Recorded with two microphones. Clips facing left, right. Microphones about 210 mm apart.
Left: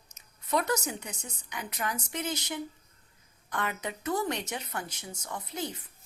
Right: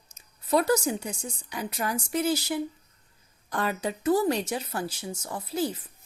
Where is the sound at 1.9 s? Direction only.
10° right (ahead or behind).